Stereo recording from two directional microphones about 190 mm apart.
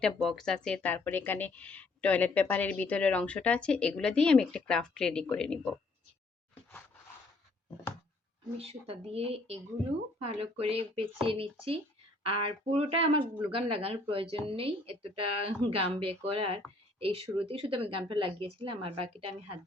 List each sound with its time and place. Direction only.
0.0 s a woman's voice: centre (ahead or behind)
6.5 s a sound: 10° left (ahead or behind)
8.5 s speech: 30° right (ahead or behind)